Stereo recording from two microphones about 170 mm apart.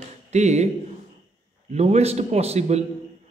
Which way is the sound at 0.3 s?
40° right (ahead or behind).